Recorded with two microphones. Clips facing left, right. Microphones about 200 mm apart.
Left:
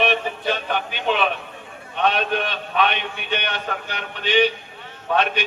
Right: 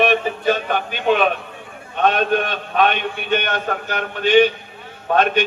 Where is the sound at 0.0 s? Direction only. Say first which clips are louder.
Right 5 dB; 45° right (ahead or behind).